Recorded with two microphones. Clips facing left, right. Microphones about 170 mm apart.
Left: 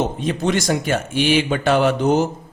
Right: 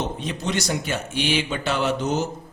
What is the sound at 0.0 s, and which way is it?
Speech, 50° left (ahead or behind).